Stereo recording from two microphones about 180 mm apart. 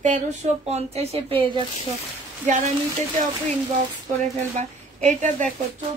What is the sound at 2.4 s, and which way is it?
Speech, 45° right (ahead or behind).